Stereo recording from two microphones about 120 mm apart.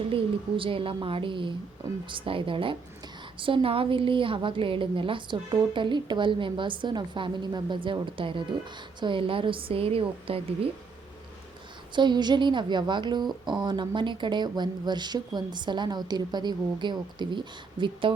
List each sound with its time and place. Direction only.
0.1 s a woman's voice: 45° right (ahead or behind)
11.9 s a woman's voice: 40° right (ahead or behind)